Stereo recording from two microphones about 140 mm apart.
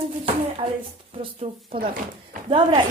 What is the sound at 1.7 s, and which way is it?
Speech, 75° right (ahead or behind).